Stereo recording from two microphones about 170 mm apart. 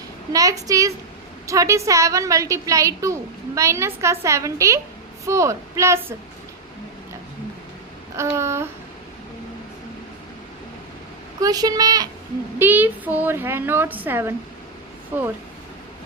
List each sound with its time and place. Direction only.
0.3 s a woman's voice: 20° right (ahead or behind)
8.1 s a woman's voice: 15° right (ahead or behind)
11.3 s a woman's voice: 20° right (ahead or behind)
12.5 s a woman's voice: 10° right (ahead or behind)